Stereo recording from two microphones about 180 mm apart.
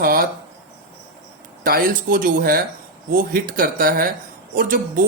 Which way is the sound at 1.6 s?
55° right (ahead or behind).